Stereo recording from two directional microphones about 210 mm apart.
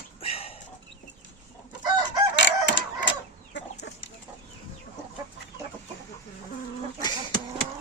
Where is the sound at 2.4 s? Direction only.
60° left (ahead or behind).